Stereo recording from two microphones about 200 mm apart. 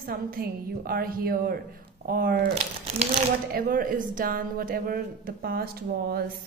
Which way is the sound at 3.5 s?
45° right (ahead or behind).